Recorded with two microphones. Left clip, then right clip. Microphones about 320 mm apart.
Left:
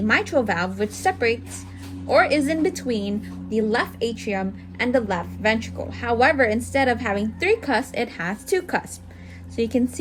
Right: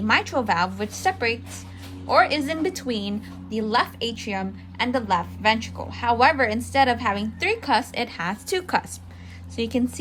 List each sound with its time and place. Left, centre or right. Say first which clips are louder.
0.1 s a woman's voice: even; centre